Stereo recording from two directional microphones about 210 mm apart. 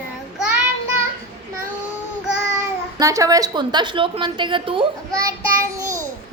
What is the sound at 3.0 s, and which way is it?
A woman's voice, 15° right (ahead or behind).